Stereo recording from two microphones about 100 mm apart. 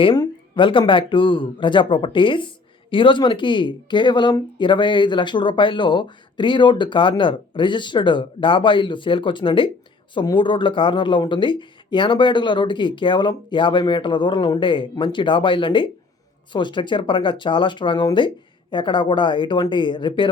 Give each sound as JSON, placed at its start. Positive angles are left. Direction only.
{"t": 0.0, "sound": "speech", "side_deg": 50}